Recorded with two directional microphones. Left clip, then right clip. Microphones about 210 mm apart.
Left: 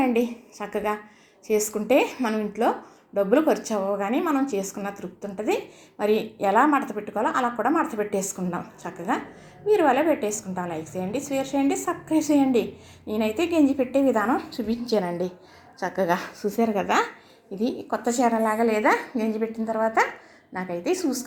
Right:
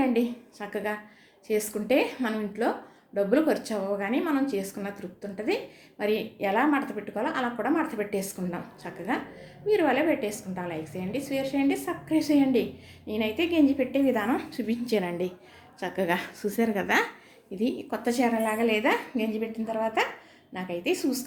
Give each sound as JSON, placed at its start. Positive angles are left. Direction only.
{"t": 0.0, "sound": "a woman's voice", "side_deg": 20}
{"t": 16.0, "sound": "a woman's voice", "side_deg": 5}